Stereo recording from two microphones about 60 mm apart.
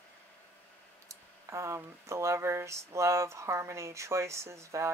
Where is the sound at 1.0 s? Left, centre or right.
Right.